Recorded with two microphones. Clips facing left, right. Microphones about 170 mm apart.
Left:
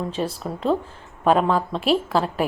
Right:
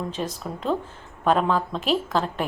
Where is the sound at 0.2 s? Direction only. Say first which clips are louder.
Left 4 dB; 5° left (ahead or behind).